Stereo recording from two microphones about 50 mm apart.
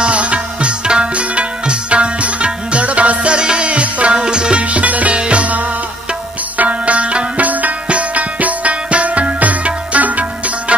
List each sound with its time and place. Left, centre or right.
0.0 s music: right
6.6 s music: right